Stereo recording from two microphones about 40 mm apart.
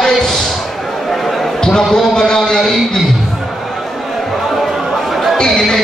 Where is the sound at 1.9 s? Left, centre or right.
Centre.